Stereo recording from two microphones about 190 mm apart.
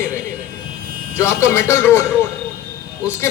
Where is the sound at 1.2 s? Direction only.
15° left (ahead or behind).